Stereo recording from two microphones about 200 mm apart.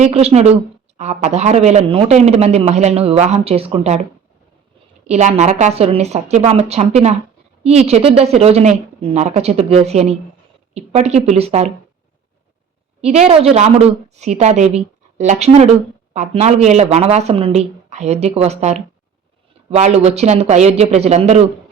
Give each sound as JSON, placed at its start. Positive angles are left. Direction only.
{"t": 0.0, "sound": "speech", "side_deg": -30}
{"t": 5.0, "sound": "speech", "side_deg": -35}
{"t": 13.0, "sound": "speech", "side_deg": -35}